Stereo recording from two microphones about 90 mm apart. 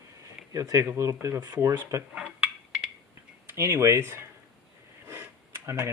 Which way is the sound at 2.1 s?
10° right (ahead or behind).